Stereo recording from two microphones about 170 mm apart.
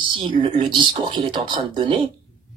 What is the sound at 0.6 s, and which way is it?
Speech, 30° right (ahead or behind).